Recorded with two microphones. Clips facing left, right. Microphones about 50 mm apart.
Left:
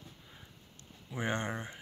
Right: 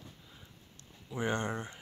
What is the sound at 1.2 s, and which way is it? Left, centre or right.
Speech, left.